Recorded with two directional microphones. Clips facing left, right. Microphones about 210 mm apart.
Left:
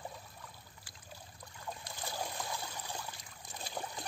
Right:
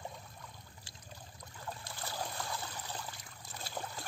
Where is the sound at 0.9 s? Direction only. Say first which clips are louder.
Right 2 dB; 25° right (ahead or behind).